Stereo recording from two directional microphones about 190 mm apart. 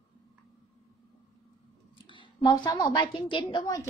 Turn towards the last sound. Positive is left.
turn(degrees=20)  # may be behind; listen again after turning